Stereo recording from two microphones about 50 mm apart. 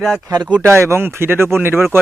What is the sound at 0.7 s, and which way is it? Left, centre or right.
Speech, right.